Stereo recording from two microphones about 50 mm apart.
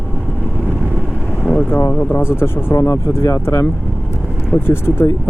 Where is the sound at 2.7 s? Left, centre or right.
Left.